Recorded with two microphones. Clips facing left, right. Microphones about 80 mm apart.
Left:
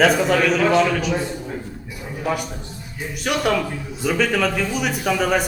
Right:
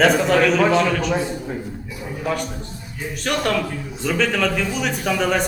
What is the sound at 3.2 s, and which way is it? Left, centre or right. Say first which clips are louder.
A man's voice: left 1 dB; centre.